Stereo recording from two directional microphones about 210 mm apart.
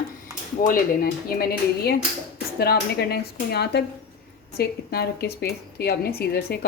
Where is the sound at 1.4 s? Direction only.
45° left (ahead or behind).